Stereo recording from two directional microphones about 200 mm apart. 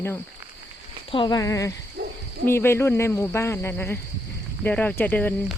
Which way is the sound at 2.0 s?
55° right (ahead or behind).